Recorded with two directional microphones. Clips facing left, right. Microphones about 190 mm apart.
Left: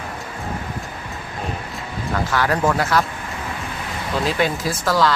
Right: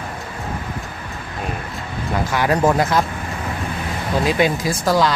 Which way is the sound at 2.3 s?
15° right (ahead or behind).